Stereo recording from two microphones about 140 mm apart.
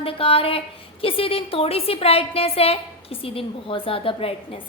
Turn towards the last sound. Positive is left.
turn(degrees=40)  # may be behind; listen again after turning